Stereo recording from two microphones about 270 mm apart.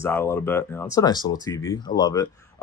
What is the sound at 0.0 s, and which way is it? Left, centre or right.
Speech, centre.